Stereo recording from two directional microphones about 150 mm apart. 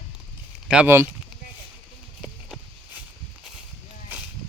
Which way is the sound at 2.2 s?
5° right (ahead or behind).